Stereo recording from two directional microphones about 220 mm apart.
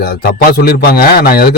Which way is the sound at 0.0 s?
45° left (ahead or behind).